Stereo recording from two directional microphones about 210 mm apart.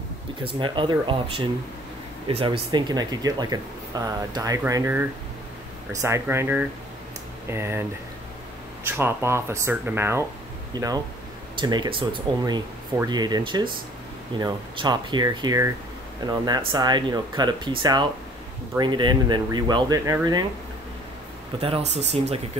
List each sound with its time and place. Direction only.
0.6 s speech: 20° right (ahead or behind)
8.8 s speech: 10° right (ahead or behind)
21.5 s speech: 30° right (ahead or behind)